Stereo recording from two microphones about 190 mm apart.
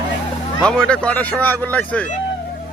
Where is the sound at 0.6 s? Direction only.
5° left (ahead or behind).